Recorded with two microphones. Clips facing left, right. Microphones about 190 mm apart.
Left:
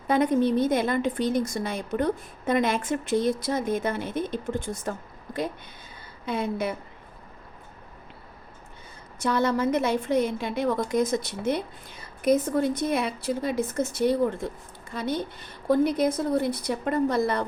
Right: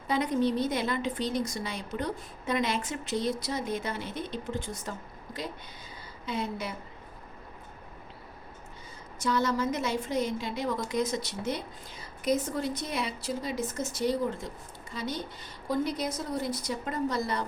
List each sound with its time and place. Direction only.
0.1 s a woman's voice: 55° left (ahead or behind)
9.1 s a woman's voice: 60° left (ahead or behind)